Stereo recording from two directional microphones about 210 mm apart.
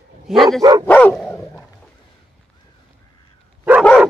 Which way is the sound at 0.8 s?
5° left (ahead or behind).